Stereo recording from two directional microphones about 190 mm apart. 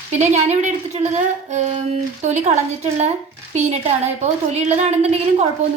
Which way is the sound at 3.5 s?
35° right (ahead or behind).